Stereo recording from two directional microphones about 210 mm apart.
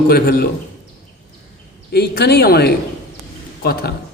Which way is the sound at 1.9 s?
50° left (ahead or behind).